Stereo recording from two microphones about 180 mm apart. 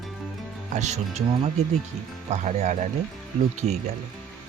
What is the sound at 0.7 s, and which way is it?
Speech, 40° right (ahead or behind).